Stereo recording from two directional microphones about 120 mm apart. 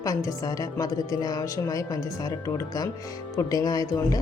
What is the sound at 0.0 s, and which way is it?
A woman's voice, 30° left (ahead or behind).